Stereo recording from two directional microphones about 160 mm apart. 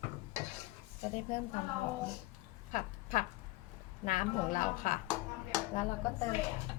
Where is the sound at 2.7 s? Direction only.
55° left (ahead or behind).